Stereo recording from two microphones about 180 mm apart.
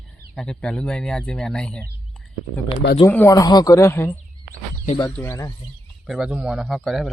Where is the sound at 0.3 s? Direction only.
5° left (ahead or behind).